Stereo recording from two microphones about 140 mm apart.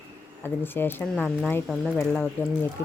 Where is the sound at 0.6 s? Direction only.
15° left (ahead or behind).